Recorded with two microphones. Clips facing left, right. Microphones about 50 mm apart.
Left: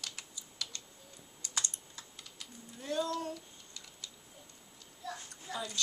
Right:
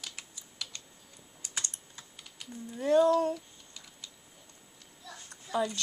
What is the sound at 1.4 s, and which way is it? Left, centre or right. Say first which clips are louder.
Computer keyboard: even; centre.